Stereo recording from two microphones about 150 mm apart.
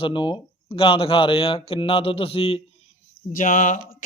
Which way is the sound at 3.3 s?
60° left (ahead or behind).